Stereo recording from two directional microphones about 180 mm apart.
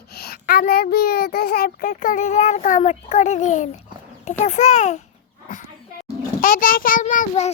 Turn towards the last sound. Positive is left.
turn(degrees=45)  # may be behind; listen again after turning